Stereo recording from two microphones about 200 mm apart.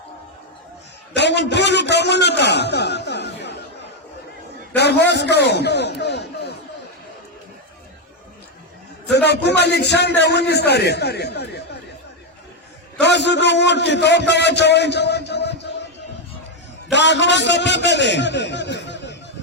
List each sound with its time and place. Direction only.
1.1 s a sound: 60° left (ahead or behind)
4.7 s a man's voice: 55° left (ahead or behind)
9.0 s speech: 55° left (ahead or behind)
13.0 s a man's voice: 60° left (ahead or behind)
16.9 s a man's voice: 60° left (ahead or behind)